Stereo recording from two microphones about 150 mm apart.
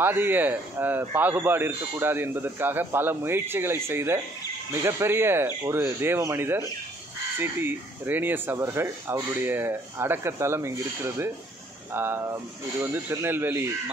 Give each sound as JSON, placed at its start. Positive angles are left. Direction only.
{"t": 0.0, "sound": "a man's voice", "side_deg": -15}
{"t": 11.9, "sound": "a man's voice", "side_deg": -15}